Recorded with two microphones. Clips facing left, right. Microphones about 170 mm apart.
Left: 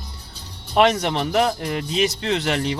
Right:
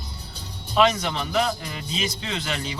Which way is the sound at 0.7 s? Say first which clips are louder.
Left 3 dB; 65° left (ahead or behind).